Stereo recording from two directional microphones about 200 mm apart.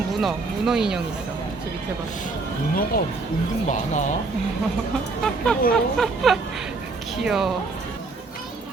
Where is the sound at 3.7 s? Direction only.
40° left (ahead or behind).